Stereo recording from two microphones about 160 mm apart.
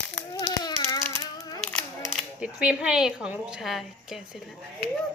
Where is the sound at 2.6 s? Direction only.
5° right (ahead or behind).